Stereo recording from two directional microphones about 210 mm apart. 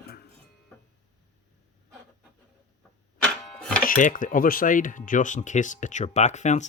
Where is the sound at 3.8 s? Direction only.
40° left (ahead or behind).